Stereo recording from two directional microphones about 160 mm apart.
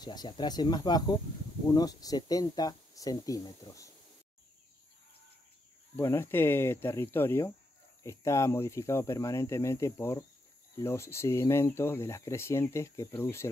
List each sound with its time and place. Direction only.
0.0 s speech: 25° left (ahead or behind)
5.9 s speech: 15° left (ahead or behind)